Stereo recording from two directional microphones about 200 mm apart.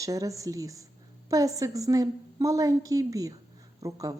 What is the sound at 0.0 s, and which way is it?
A woman's voice, 15° right (ahead or behind).